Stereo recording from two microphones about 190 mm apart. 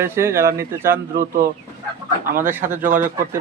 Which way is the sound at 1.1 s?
50° right (ahead or behind).